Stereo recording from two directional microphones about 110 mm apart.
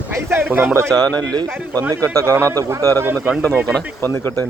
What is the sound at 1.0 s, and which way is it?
Speech, 10° left (ahead or behind).